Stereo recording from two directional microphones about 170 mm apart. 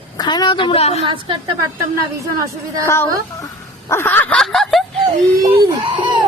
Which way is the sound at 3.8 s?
15° left (ahead or behind).